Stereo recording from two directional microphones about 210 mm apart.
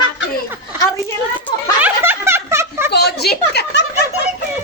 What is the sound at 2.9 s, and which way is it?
Speech, 50° left (ahead or behind).